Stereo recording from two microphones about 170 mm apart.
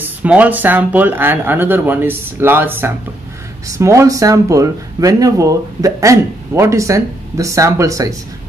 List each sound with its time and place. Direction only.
0.2 s speech: 10° right (ahead or behind)